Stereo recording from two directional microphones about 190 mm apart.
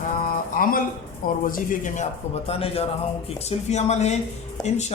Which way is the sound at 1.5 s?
45° left (ahead or behind).